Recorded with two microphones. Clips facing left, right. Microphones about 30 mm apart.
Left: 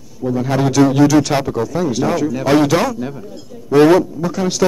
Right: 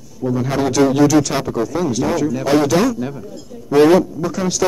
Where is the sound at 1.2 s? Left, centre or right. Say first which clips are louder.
Left 2 dB; left.